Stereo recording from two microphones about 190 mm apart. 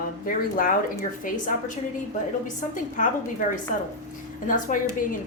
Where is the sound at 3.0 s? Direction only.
40° left (ahead or behind).